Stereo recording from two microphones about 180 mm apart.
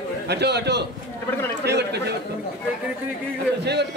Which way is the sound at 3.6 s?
70° right (ahead or behind).